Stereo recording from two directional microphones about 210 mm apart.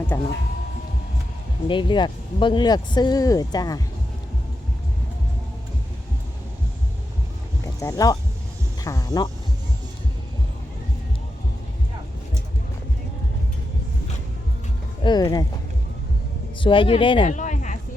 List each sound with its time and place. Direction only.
0.1 s speech: 15° left (ahead or behind)
1.6 s speech: 25° left (ahead or behind)
7.8 s speech: 15° left (ahead or behind)
15.0 s speech: 20° left (ahead or behind)
16.6 s speech: 25° left (ahead or behind)
17.3 s a sound: 35° left (ahead or behind)